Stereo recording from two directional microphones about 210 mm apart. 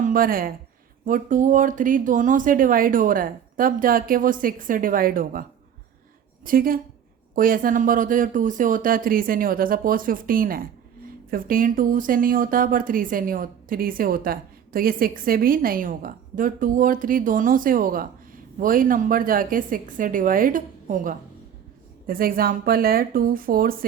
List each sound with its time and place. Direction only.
0.0 s a woman's voice: 40° right (ahead or behind)